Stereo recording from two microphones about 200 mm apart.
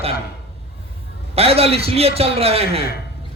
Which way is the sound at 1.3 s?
30° right (ahead or behind).